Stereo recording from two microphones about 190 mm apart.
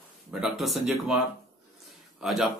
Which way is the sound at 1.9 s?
Centre (ahead or behind).